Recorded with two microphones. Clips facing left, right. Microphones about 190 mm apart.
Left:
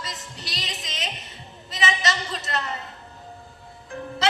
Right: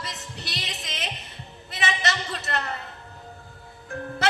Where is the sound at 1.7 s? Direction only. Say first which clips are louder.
Left 2 dB; 60° right (ahead or behind).